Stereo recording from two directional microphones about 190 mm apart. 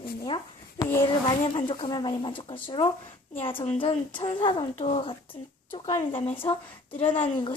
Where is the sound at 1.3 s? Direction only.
25° left (ahead or behind).